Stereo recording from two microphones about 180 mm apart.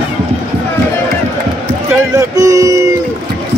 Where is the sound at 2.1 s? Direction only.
20° right (ahead or behind).